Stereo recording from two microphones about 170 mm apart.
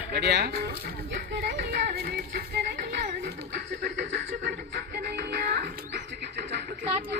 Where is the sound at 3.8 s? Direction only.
90° right.